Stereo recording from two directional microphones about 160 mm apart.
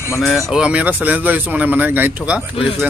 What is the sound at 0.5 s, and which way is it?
Speech, 5° right (ahead or behind).